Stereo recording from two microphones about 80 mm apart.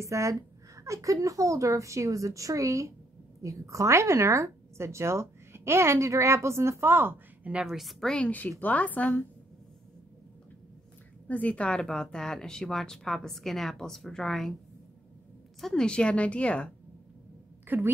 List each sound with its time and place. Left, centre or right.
0.0 s a woman's voice: right
7.6 s a woman's voice: centre
8.3 s a woman's voice: left
11.2 s speech: centre
15.6 s speech: centre
17.6 s a woman's voice: right